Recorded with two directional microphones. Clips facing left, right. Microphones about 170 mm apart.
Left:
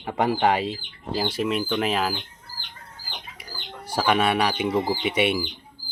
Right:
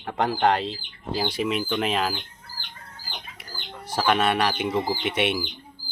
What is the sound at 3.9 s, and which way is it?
Speech, 5° left (ahead or behind).